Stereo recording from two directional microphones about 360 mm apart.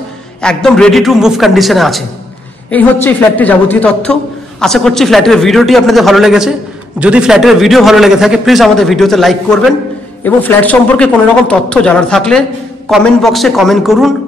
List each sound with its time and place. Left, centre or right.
0.4 s a man's voice: centre